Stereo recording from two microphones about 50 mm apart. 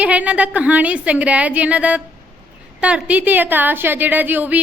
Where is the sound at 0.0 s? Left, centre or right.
Right.